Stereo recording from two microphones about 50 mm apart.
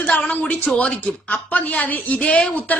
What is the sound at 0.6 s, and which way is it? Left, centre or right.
Speech, left.